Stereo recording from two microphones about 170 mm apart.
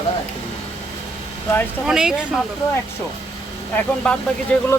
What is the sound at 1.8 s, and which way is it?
Speech, 5° right (ahead or behind).